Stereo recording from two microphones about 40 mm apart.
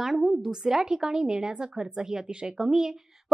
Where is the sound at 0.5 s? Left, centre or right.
Centre.